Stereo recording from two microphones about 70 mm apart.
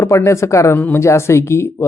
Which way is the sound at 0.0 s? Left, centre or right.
Left.